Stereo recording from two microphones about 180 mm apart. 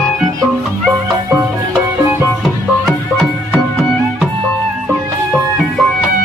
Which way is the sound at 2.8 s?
Centre (ahead or behind).